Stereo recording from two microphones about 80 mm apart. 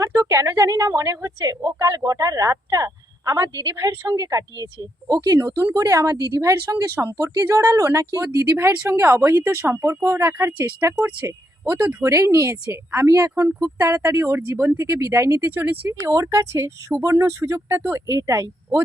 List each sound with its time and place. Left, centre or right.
0.0 s a woman's voice: right
10.3 s speech: right
13.1 s a woman's voice: right
15.4 s speech: right
16.0 s speech: right